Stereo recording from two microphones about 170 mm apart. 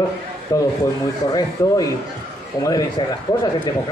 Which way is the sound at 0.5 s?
20° left (ahead or behind).